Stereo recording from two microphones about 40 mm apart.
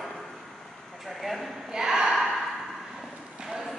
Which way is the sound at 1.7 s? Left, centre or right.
Centre.